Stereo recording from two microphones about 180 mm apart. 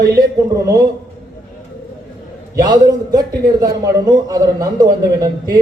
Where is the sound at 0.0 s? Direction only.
20° right (ahead or behind).